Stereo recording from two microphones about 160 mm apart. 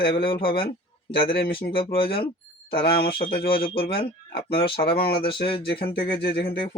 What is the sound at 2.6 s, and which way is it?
Speech, 70° left (ahead or behind).